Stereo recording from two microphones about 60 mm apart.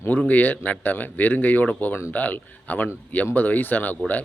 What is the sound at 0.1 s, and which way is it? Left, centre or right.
A man's voice, left.